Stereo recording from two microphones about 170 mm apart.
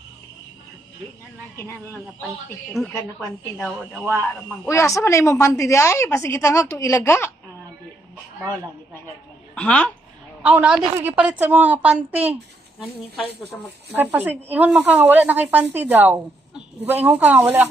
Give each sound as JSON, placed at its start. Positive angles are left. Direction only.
{"t": 2.8, "sound": "speech", "side_deg": 0}
{"t": 4.6, "sound": "a woman's voice", "side_deg": 15}
{"t": 9.6, "sound": "a woman's voice", "side_deg": 5}
{"t": 10.4, "sound": "speech", "side_deg": -5}
{"t": 13.9, "sound": "speech", "side_deg": -10}